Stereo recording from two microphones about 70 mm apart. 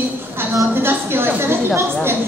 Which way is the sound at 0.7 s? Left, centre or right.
Right.